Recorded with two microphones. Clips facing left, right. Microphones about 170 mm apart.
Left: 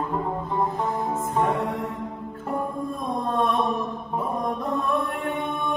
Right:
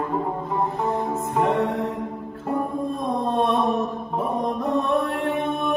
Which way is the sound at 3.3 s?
25° right (ahead or behind).